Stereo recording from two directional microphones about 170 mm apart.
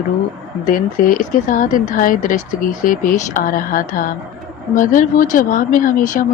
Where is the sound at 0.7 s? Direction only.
55° left (ahead or behind).